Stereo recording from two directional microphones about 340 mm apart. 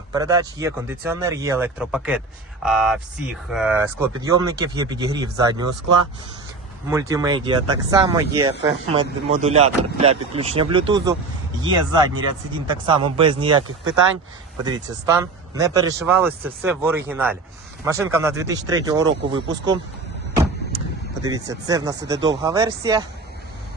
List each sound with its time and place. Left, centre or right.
0.1 s speech: centre
6.9 s speech: centre
14.6 s speech: centre
21.2 s speech: centre